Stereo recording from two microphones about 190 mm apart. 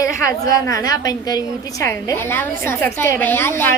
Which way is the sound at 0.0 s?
20° left (ahead or behind).